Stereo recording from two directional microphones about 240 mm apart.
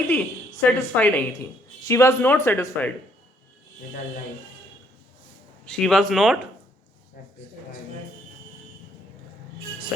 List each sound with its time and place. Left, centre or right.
0.1 s a woman's voice: centre
5.6 s speech: centre